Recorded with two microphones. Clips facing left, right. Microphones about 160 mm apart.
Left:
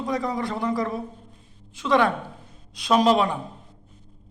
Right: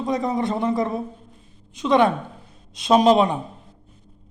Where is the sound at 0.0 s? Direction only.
20° right (ahead or behind).